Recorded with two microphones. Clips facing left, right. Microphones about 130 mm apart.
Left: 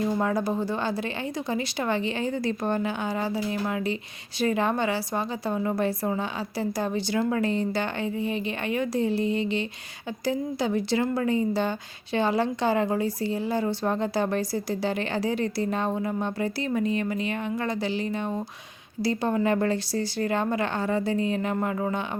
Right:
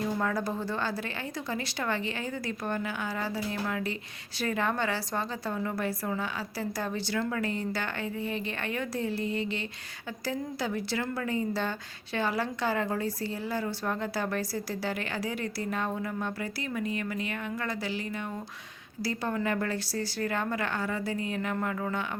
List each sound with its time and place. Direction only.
0.2 s a woman's voice: 20° left (ahead or behind)